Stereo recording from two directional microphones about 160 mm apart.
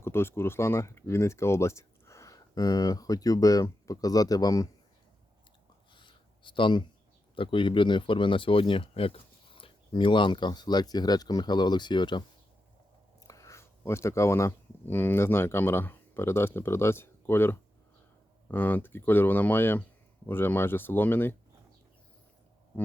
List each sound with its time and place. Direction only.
0.0 s speech: 15° left (ahead or behind)
5.9 s a sound: 30° left (ahead or behind)
7.3 s speech: 30° left (ahead or behind)
13.2 s speech: 20° left (ahead or behind)